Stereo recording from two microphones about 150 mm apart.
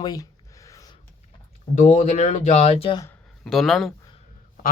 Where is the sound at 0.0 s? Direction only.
25° left (ahead or behind).